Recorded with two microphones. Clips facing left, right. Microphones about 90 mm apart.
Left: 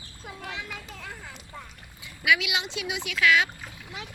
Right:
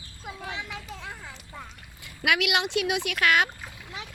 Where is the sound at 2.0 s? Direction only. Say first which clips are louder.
Left 1 dB; 70° right (ahead or behind); by 3.5 s 50° right (ahead or behind).